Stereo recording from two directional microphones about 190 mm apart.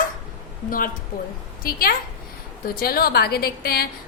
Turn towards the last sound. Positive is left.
turn(degrees=55)  # may be behind; listen again after turning